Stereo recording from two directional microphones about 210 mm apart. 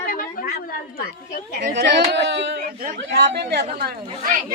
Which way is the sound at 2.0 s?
55° right (ahead or behind).